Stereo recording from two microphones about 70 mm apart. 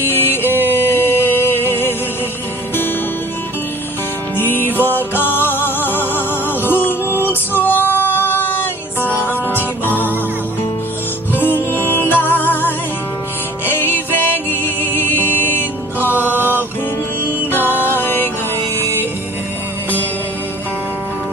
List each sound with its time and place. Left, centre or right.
0.0 s music: left
0.7 s a sound: left
1.7 s music: left
4.4 s music: left
11.3 s music: left